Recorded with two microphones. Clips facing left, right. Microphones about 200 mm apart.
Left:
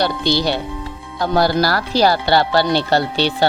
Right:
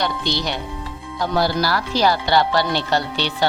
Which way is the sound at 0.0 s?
35° left (ahead or behind).